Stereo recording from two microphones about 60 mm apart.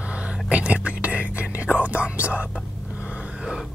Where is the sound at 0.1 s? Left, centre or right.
Right.